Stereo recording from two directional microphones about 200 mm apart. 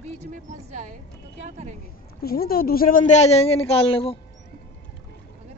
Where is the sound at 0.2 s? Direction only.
35° right (ahead or behind).